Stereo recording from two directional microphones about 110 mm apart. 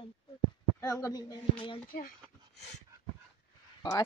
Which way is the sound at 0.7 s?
30° left (ahead or behind).